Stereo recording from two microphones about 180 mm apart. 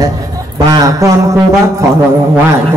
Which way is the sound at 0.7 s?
20° right (ahead or behind).